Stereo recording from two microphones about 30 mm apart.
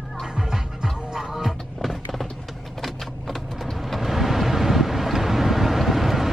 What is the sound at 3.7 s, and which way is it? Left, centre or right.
Vehicle, centre.